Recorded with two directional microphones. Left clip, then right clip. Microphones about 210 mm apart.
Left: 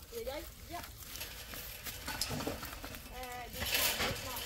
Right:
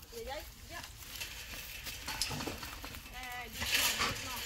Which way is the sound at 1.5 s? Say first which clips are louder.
Right 2 dB; 50° left (ahead or behind).